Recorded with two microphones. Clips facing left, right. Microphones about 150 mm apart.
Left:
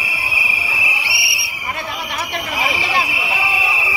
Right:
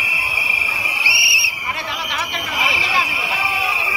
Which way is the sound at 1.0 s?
55° left (ahead or behind).